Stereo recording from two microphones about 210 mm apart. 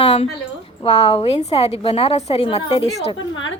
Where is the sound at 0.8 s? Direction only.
30° left (ahead or behind).